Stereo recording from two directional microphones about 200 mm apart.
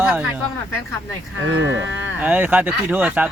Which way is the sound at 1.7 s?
70° right (ahead or behind).